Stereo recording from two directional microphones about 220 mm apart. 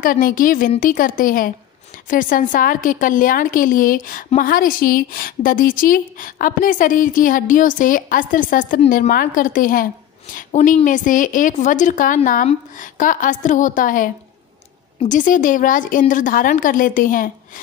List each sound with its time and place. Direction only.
0.0 s a woman's voice: 40° left (ahead or behind)